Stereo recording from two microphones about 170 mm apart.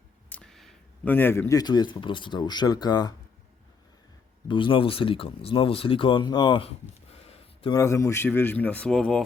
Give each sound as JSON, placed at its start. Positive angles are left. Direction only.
{"t": 0.3, "sound": "speech", "side_deg": 5}
{"t": 4.4, "sound": "speech", "side_deg": 30}
{"t": 7.3, "sound": "a sound", "side_deg": 35}
{"t": 7.7, "sound": "speech", "side_deg": 15}